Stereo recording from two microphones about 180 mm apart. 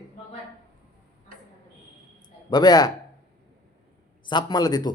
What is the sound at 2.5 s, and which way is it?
Speech, 20° left (ahead or behind).